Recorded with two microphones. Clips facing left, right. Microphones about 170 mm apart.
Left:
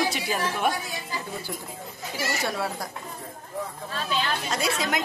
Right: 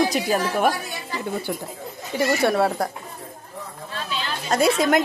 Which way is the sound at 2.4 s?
60° right (ahead or behind).